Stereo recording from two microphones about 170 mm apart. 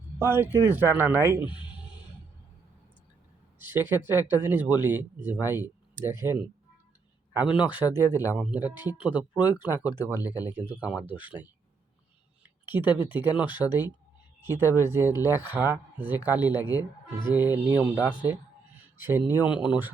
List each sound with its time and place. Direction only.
0.2 s speech: 15° right (ahead or behind)
1.4 s speech: 30° left (ahead or behind)
3.6 s speech: 10° right (ahead or behind)
7.5 s speech: 10° right (ahead or behind)
9.8 s speech: 20° left (ahead or behind)
10.4 s speech: 10° right (ahead or behind)
12.6 s speech: 10° right (ahead or behind)
13.6 s speech: 15° left (ahead or behind)
14.4 s speech: 15° right (ahead or behind)